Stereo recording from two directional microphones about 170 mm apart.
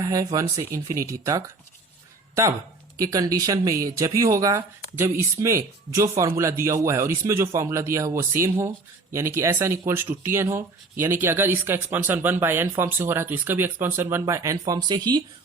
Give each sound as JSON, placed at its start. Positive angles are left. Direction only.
{"t": 0.0, "sound": "speech", "side_deg": -20}
{"t": 3.0, "sound": "speech", "side_deg": -20}